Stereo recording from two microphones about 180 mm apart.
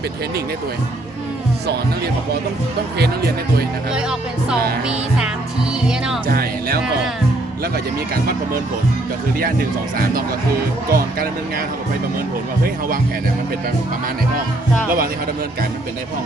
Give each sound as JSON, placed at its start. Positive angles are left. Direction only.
{"t": 4.4, "sound": "music", "side_deg": -5}
{"t": 6.2, "sound": "speech", "side_deg": -55}
{"t": 10.9, "sound": "speech", "side_deg": -55}